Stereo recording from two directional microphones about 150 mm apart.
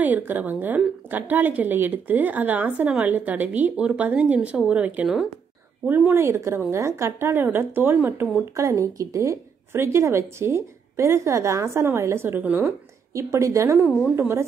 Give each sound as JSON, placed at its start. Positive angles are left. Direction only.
{"t": 0.0, "sound": "a woman's voice", "side_deg": -10}